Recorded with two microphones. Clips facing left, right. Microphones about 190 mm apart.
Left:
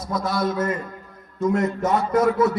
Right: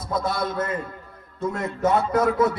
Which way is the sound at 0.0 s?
55° right (ahead or behind).